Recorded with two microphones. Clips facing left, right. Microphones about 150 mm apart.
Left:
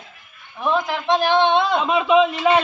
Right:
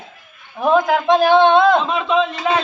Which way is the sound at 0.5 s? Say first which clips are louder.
Right 7 dB; 50° right (ahead or behind).